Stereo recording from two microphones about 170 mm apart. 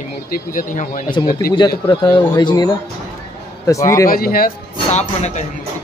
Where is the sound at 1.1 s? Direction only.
25° left (ahead or behind).